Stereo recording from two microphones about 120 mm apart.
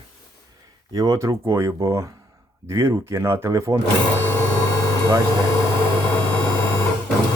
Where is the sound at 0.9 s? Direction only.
30° right (ahead or behind).